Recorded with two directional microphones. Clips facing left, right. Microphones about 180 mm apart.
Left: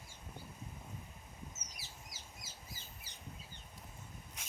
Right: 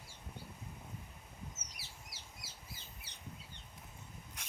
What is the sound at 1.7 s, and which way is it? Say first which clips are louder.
Bird: left 1 dB; 65° right (ahead or behind).